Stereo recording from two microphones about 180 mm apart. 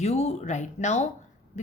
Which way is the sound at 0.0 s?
35° left (ahead or behind).